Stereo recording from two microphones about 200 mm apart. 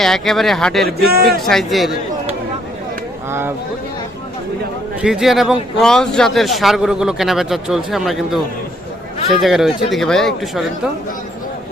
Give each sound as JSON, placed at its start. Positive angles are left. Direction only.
{"t": 0.0, "sound": "a man's voice", "side_deg": 0}
{"t": 0.9, "sound": "speech", "side_deg": -50}
{"t": 1.5, "sound": "a man's voice", "side_deg": 0}
{"t": 5.0, "sound": "a man's voice", "side_deg": 0}